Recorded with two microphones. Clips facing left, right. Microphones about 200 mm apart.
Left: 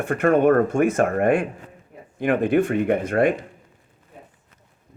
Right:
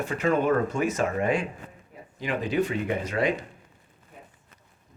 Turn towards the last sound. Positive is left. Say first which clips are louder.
# left 7 dB
turn(degrees=55)  # may be behind; listen again after turning